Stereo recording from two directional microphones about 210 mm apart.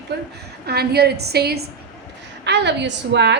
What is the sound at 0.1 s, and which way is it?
A woman's voice, 50° right (ahead or behind).